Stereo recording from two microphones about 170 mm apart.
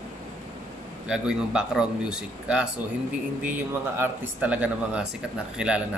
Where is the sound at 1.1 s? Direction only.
5° right (ahead or behind).